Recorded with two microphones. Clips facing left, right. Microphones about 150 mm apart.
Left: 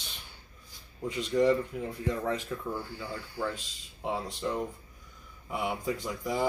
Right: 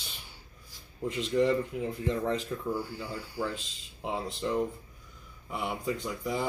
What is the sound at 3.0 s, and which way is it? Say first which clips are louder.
Speech: right 1 dB; 20° left (ahead or behind).